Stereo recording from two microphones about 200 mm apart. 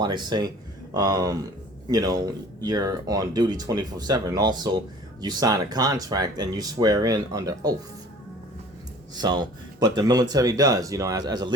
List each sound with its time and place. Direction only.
0.0 s speech: 20° right (ahead or behind)
9.1 s speech: 20° right (ahead or behind)